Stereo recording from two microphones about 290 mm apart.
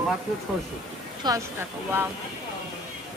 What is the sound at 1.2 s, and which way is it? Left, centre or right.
Speech, centre.